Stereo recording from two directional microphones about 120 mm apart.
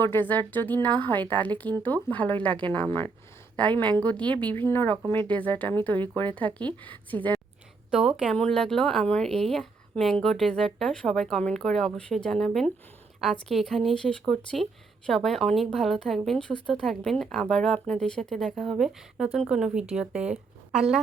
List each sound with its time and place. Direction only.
0.0 s speech: 15° left (ahead or behind)
7.9 s speech: 5° right (ahead or behind)